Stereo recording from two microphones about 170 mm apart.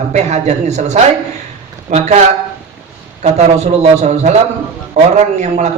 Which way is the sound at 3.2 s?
40° right (ahead or behind).